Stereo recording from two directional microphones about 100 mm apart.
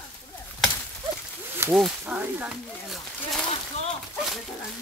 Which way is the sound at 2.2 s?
15° right (ahead or behind).